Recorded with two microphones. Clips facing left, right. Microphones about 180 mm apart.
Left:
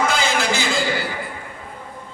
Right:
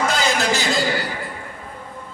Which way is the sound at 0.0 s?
40° right (ahead or behind).